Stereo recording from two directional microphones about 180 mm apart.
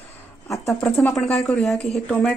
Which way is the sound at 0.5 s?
15° left (ahead or behind).